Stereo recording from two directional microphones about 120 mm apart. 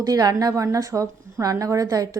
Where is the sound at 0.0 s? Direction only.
30° right (ahead or behind).